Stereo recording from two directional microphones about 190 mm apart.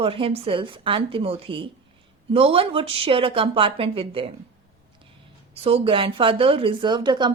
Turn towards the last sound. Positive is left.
turn(degrees=-25)  # may be behind; listen again after turning